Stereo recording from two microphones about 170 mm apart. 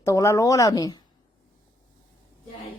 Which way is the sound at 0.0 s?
20° left (ahead or behind).